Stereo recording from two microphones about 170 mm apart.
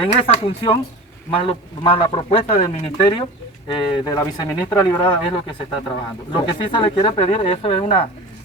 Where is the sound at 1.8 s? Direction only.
30° left (ahead or behind).